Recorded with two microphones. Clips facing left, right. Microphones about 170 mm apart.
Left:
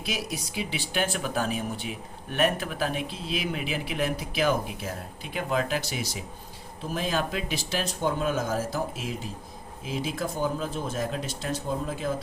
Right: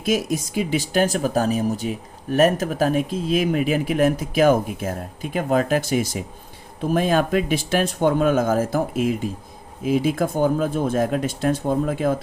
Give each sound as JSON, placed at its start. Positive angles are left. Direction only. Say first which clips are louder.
{"t": 0.0, "sound": "speech", "louder": "right 11 dB", "side_deg": -45}